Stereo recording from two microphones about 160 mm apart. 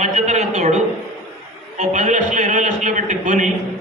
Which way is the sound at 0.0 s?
45° right (ahead or behind).